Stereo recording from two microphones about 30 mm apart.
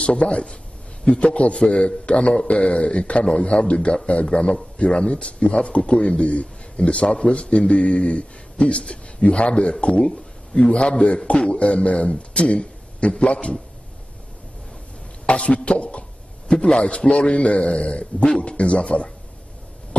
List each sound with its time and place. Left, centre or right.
0.0 s speech: left
15.2 s speech: left
16.6 s speech: left